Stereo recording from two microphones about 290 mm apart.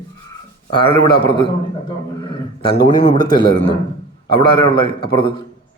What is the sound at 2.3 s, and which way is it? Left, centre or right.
A man's voice, centre.